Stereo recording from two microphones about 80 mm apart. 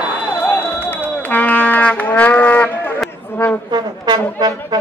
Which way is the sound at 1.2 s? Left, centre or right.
Left.